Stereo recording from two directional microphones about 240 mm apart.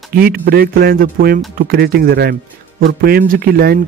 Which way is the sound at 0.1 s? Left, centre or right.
Right.